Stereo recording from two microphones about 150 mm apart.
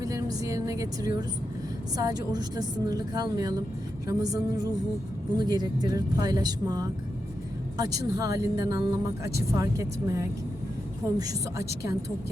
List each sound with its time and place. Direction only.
0.0 s speech: 25° right (ahead or behind)